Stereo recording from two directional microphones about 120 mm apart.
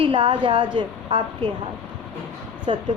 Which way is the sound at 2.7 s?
55° right (ahead or behind).